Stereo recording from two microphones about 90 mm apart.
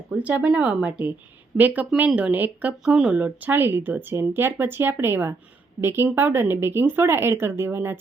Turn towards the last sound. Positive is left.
turn(degrees=-25)  # may be behind; listen again after turning